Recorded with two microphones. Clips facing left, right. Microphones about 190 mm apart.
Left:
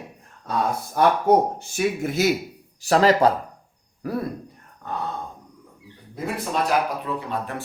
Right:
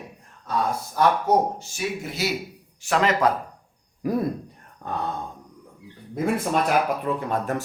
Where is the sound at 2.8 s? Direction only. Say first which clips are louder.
Left 4 dB; 35° left (ahead or behind).